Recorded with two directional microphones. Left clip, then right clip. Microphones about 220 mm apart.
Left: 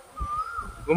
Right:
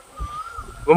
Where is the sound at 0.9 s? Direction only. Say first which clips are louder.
Right 9 dB; 15° right (ahead or behind).